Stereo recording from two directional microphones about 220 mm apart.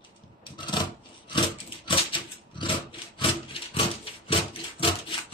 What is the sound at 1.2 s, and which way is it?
Dog, 20° left (ahead or behind).